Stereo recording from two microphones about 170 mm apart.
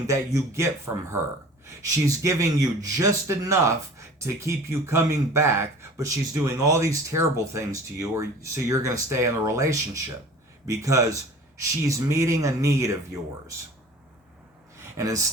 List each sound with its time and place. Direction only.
0.1 s a man's voice: 15° right (ahead or behind)
14.9 s speech: 20° right (ahead or behind)